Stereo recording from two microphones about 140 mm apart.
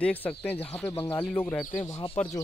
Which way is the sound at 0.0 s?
10° left (ahead or behind).